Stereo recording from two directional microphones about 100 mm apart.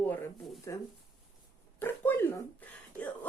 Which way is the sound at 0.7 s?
30° left (ahead or behind).